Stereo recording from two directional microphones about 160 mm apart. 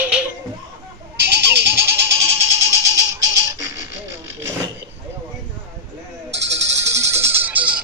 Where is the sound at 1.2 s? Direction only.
90° right.